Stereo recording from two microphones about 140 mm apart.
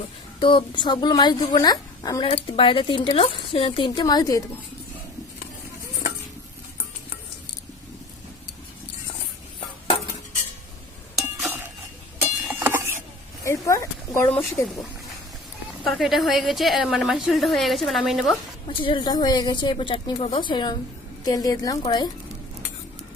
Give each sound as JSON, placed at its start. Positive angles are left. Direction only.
{"t": 0.3, "sound": "speech", "side_deg": 35}
{"t": 2.2, "sound": "speech", "side_deg": 50}
{"t": 11.4, "sound": "chink", "side_deg": -15}
{"t": 12.2, "sound": "a sound", "side_deg": -15}
{"t": 13.4, "sound": "a sound", "side_deg": 20}
{"t": 15.8, "sound": "a woman's voice", "side_deg": 0}
{"t": 18.7, "sound": "a woman's voice", "side_deg": 35}